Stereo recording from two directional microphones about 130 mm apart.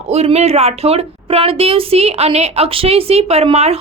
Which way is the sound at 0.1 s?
55° right (ahead or behind).